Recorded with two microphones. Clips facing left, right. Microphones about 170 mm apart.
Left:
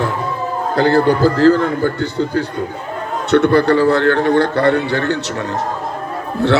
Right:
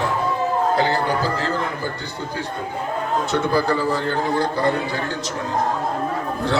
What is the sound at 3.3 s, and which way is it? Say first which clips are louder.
A man's voice: left 10 dB; 65° left (ahead or behind).